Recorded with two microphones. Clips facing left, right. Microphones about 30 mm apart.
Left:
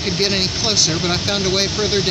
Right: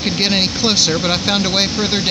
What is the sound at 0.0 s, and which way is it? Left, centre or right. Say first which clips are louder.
Speech: right 2 dB; right.